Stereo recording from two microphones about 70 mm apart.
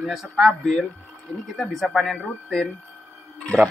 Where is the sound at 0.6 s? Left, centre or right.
Centre.